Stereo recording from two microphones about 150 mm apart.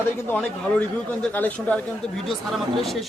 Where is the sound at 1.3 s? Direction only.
10° left (ahead or behind).